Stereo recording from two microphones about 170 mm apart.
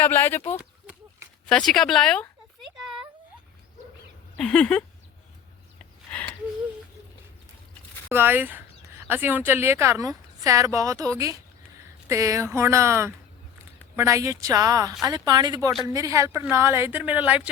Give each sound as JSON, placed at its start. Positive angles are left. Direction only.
{"t": 0.0, "sound": "speech", "side_deg": 10}
{"t": 1.5, "sound": "speech", "side_deg": 5}
{"t": 2.6, "sound": "a sound", "side_deg": 0}
{"t": 4.4, "sound": "speech", "side_deg": 5}
{"t": 8.1, "sound": "a woman's voice", "side_deg": -10}